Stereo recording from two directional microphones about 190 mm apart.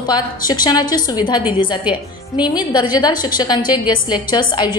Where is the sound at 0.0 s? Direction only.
20° left (ahead or behind).